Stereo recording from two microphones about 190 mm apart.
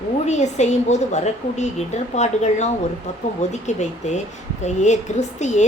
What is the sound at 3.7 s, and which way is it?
A woman's voice, 40° left (ahead or behind).